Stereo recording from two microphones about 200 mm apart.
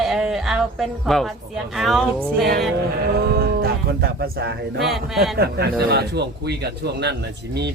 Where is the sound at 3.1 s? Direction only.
50° right (ahead or behind).